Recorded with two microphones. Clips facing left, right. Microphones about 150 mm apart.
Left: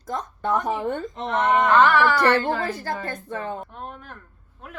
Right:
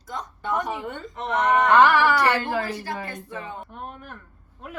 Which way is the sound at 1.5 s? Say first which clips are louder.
Right 1 dB; 10° right (ahead or behind).